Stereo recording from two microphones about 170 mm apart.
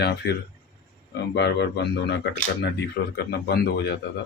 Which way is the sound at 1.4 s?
80° left.